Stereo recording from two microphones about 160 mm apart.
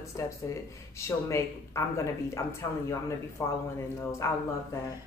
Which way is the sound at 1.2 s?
20° left (ahead or behind).